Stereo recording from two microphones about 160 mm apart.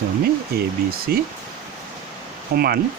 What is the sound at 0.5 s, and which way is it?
Speech, 75° right (ahead or behind).